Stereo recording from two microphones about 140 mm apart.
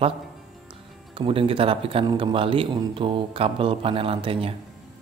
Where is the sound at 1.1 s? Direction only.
40° right (ahead or behind).